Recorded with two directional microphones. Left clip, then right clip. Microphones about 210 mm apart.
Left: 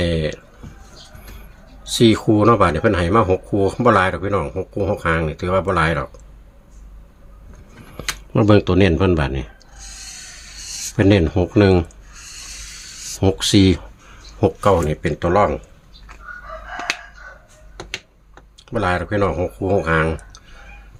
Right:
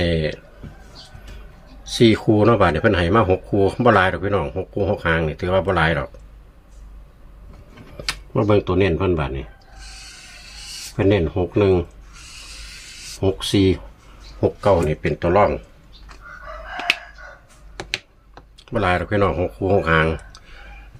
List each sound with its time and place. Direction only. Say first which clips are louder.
0.0 s a sound: even; 10° left (ahead or behind)
1.8 s speech: left 1 dB; 15° left (ahead or behind)
7.9 s speech: left 2 dB; 40° left (ahead or behind)
10.7 s a sound: left 5 dB; 15° left (ahead or behind)
10.9 s speech: left 3 dB; 40° left (ahead or behind)
13.0 s a sound: left 6 dB; 10° left (ahead or behind)
13.2 s speech: left 3 dB; 40° left (ahead or behind)
14.4 s speech: left 1 dB; 25° left (ahead or behind)
14.8 s speech: even; 15° left (ahead or behind)
18.6 s speech: even; 5° left (ahead or behind)